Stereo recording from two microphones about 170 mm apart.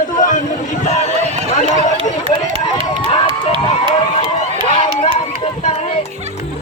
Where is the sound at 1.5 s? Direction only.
45° left (ahead or behind).